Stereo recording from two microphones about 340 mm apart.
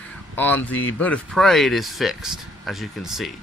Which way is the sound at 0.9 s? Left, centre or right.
Centre.